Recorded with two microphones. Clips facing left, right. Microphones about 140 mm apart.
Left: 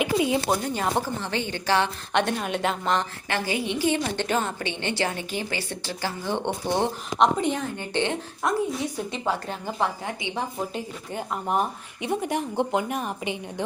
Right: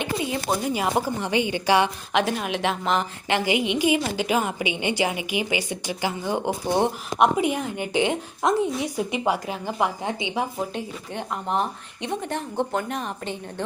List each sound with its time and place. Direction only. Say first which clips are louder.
0.0 s a sound: left 4 dB; 10° left (ahead or behind)
0.5 s a woman's voice: right 2 dB; 10° right (ahead or behind)
2.1 s speech: even; centre (ahead or behind)
3.2 s a woman's voice: right 8 dB; 15° right (ahead or behind)
3.9 s a woman's voice: right 2 dB; 5° right (ahead or behind)
10.0 s a woman's voice: right 4 dB; 20° right (ahead or behind)
10.3 s a woman's voice: right 2 dB; centre (ahead or behind)